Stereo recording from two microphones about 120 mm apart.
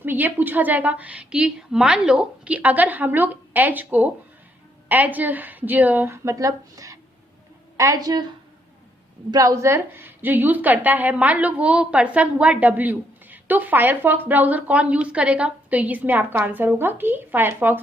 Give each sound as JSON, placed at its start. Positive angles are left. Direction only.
{"t": 0.0, "sound": "a woman's voice", "side_deg": -15}
{"t": 9.3, "sound": "a woman's voice", "side_deg": -25}